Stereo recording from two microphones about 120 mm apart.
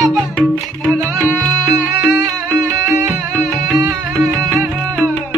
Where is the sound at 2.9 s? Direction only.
10° right (ahead or behind).